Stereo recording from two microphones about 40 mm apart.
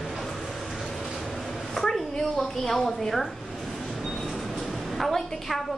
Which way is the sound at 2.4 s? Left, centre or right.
Centre.